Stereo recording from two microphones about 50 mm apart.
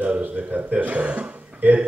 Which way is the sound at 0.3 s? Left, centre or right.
Right.